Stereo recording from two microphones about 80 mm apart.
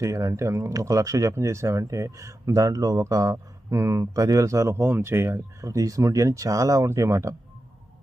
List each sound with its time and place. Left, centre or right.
0.0 s speech: right